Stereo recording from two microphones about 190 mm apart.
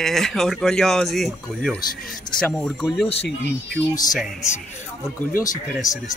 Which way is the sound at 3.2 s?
60° left (ahead or behind).